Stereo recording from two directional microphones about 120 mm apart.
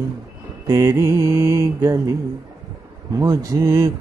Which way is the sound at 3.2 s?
30° right (ahead or behind).